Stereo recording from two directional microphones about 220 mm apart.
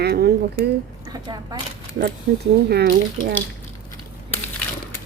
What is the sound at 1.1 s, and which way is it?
Speech, 15° right (ahead or behind).